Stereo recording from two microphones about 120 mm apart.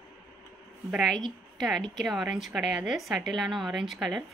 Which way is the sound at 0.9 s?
Centre (ahead or behind).